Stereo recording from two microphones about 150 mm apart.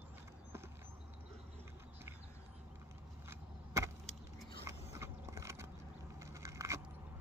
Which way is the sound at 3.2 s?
20° right (ahead or behind).